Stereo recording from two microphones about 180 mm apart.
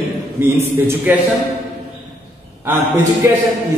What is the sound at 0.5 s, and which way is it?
Speech, 15° right (ahead or behind).